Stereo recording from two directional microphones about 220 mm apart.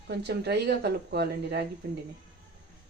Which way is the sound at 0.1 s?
50° right (ahead or behind).